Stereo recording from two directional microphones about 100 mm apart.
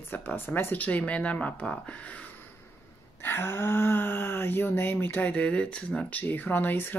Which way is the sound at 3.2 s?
20° left (ahead or behind).